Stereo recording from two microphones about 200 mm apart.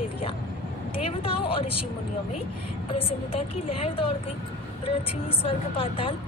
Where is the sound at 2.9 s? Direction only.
30° left (ahead or behind).